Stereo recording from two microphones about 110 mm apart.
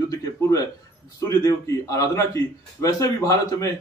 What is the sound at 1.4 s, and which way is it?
A man's voice, 30° left (ahead or behind).